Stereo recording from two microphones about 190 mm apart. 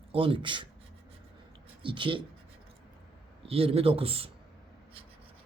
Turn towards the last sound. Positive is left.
turn(degrees=-30)  # may be behind; listen again after turning